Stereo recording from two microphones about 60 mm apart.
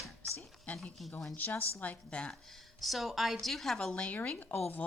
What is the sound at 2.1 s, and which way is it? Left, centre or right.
Speech, centre.